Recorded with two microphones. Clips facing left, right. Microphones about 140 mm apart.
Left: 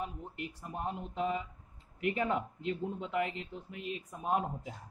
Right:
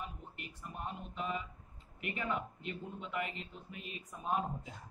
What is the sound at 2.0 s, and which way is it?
Speech, 90° left.